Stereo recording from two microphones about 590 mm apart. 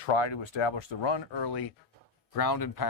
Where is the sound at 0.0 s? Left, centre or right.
Left.